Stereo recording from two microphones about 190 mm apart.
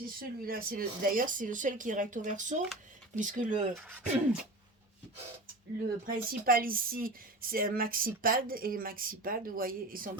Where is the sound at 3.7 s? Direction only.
5° right (ahead or behind).